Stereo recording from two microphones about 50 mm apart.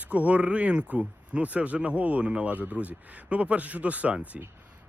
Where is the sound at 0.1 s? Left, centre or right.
Right.